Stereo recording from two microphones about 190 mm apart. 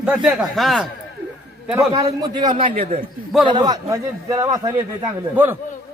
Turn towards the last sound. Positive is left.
turn(degrees=-10)  # may be behind; listen again after turning